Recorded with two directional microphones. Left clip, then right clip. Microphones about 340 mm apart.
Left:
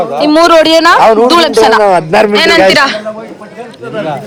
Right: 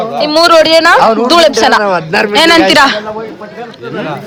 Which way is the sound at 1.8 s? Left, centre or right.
Centre.